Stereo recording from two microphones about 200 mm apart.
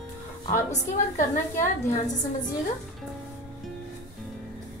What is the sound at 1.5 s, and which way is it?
Speech, 15° left (ahead or behind).